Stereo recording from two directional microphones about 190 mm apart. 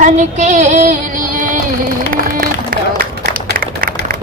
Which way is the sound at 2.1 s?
50° right (ahead or behind).